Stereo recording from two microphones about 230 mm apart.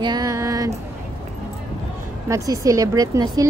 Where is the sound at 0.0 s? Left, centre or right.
Centre.